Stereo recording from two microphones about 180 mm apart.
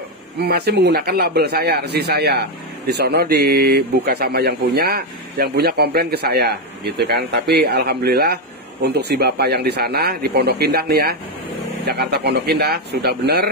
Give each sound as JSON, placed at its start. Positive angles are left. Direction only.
{"t": 0.4, "sound": "a man's voice", "side_deg": -65}